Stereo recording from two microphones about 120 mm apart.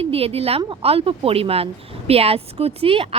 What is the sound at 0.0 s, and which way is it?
A woman's voice, 55° right (ahead or behind).